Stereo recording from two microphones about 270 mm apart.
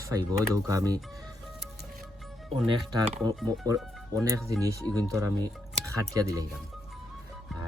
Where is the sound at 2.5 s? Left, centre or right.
Right.